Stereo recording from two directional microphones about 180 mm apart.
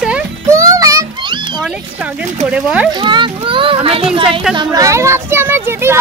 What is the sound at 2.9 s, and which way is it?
A child's voice, 25° right (ahead or behind).